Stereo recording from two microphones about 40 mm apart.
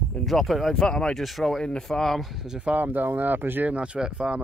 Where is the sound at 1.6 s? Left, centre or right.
Centre.